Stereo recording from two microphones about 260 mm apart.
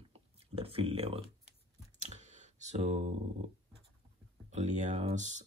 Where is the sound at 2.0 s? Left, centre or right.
Right.